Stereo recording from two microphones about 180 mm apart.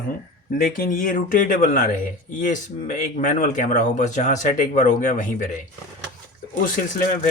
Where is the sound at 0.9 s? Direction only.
50° left (ahead or behind).